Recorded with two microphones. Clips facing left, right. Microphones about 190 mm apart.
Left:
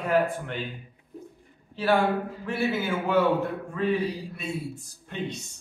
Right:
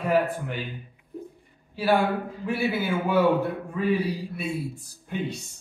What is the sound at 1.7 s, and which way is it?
A man's voice, 10° right (ahead or behind).